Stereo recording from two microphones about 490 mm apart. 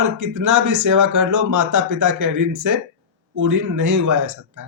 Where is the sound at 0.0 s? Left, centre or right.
Right.